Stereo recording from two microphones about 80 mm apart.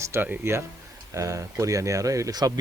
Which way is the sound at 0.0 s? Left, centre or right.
Right.